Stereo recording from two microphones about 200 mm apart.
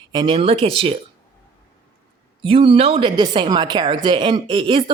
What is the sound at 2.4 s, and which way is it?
Speech, 25° right (ahead or behind).